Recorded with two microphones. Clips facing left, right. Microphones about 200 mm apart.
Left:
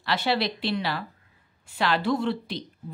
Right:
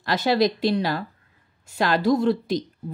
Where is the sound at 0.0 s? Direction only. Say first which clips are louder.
Right 5 dB; 40° right (ahead or behind).